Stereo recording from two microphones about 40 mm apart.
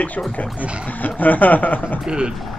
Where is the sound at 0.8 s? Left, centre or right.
Left.